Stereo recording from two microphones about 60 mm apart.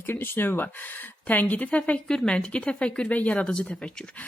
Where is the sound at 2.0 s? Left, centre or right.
Centre.